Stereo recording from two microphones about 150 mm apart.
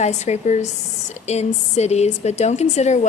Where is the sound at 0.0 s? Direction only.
50° left (ahead or behind).